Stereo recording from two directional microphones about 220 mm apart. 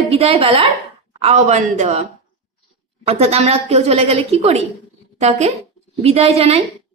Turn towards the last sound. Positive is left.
turn(degrees=-25)  # may be behind; listen again after turning